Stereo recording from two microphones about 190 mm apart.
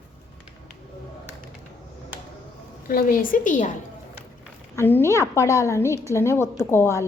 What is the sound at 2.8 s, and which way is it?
Speech, 50° left (ahead or behind).